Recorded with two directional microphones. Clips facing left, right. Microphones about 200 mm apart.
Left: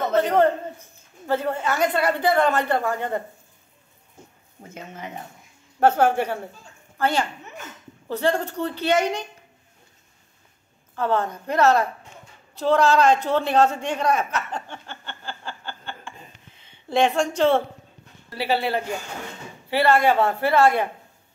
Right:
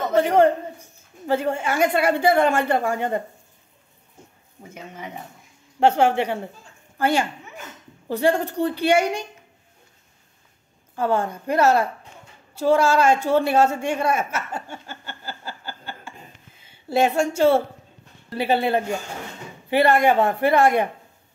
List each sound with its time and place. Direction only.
0.1 s a woman's voice: 10° right (ahead or behind)
4.6 s a woman's voice: 10° right (ahead or behind)
11.0 s a woman's voice: 10° right (ahead or behind)
18.4 s a woman's voice: 20° right (ahead or behind)